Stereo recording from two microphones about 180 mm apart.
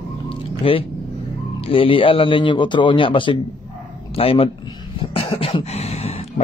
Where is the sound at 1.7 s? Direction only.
30° left (ahead or behind).